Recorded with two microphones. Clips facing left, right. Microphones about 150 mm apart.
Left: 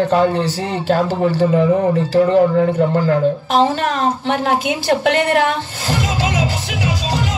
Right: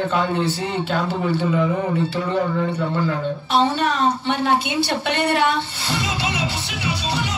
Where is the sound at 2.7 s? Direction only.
45° left (ahead or behind).